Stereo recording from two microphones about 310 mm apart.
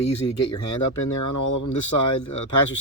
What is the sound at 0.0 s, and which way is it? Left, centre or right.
Speech, left.